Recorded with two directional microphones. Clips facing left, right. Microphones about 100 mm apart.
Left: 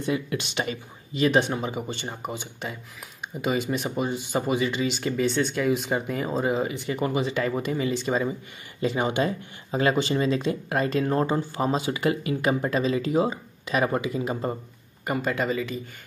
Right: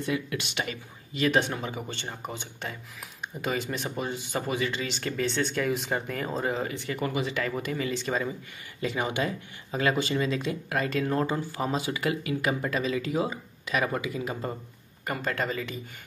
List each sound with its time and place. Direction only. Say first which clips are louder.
0.0 s speech: left 3 dB; 25° left (ahead or behind)
15.0 s speech: left 4 dB; 10° left (ahead or behind)